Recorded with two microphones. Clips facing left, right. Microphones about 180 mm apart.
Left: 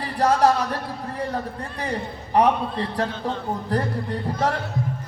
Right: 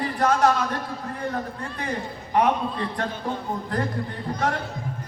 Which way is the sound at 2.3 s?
35° left (ahead or behind).